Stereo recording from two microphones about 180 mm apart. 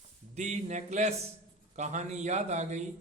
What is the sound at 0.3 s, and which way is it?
A man's voice, 40° right (ahead or behind).